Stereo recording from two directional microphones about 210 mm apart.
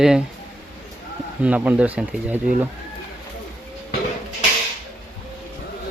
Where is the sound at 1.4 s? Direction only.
5° right (ahead or behind).